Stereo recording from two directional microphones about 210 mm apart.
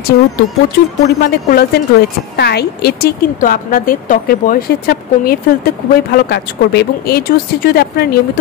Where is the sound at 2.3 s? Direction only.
50° left (ahead or behind).